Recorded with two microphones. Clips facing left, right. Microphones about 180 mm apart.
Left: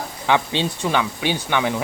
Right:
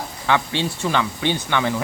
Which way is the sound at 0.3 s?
20° left (ahead or behind).